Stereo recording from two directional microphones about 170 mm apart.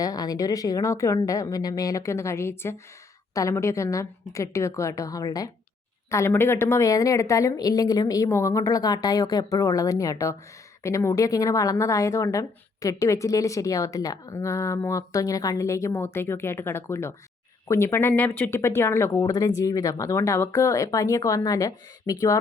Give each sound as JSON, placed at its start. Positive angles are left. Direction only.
{"t": 0.0, "sound": "a woman's voice", "side_deg": 20}